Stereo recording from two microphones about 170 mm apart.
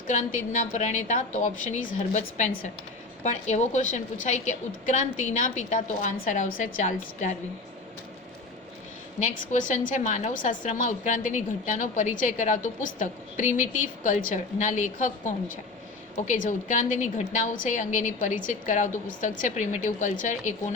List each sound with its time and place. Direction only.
0.1 s a woman's voice: 45° left (ahead or behind)
9.2 s a woman's voice: 50° left (ahead or behind)